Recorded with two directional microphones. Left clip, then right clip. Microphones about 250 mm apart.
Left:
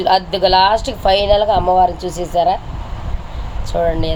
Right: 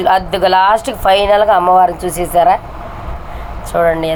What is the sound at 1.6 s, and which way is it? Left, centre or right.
Speech, right.